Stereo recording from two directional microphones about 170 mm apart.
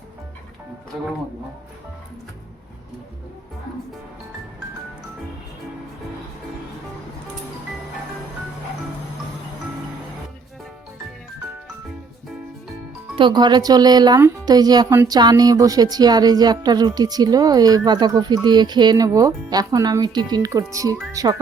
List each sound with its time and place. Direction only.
13.1 s speech: 25° right (ahead or behind)